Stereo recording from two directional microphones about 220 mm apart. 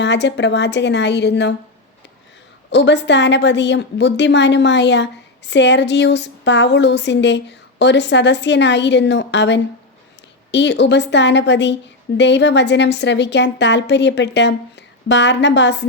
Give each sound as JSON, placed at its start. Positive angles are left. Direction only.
{"t": 0.0, "sound": "a woman's voice", "side_deg": 50}
{"t": 2.6, "sound": "a woman's voice", "side_deg": 50}